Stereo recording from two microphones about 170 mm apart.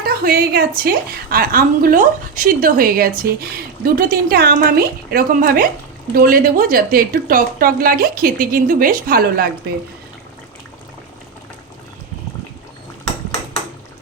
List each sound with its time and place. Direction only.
0.0 s a woman's voice: 60° right (ahead or behind)